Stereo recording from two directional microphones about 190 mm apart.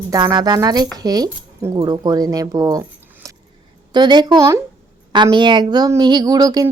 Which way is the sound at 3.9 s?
25° right (ahead or behind).